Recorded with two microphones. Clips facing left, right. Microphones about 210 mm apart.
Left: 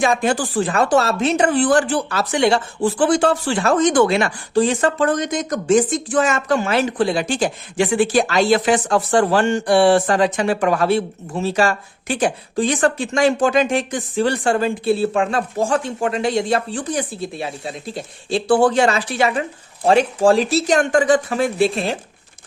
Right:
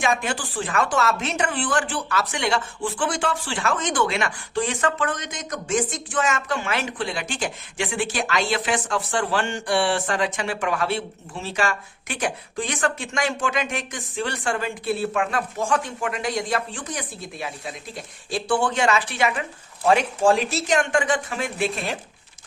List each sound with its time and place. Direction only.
0.0 s speech: 35° left (ahead or behind)